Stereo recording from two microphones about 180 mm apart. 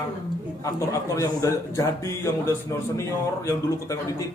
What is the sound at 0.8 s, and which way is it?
Speech, 15° left (ahead or behind).